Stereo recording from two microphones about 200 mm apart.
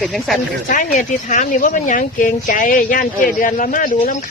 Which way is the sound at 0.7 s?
40° left (ahead or behind).